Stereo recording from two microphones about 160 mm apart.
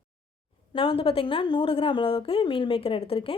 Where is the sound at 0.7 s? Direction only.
35° left (ahead or behind).